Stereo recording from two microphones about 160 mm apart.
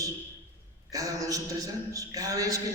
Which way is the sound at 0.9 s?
20° right (ahead or behind).